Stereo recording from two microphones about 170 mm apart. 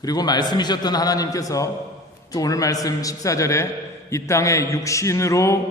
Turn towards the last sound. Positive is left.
turn(degrees=15)  # may be behind; listen again after turning